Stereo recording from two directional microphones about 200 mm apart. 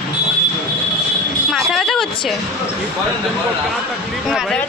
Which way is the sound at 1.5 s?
Centre (ahead or behind).